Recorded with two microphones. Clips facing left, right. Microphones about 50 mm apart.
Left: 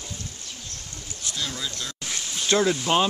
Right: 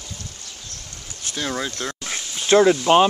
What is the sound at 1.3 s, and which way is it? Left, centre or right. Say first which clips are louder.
Speech: right 6 dB; right.